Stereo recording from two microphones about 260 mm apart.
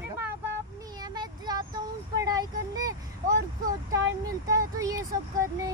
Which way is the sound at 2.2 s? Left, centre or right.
Centre.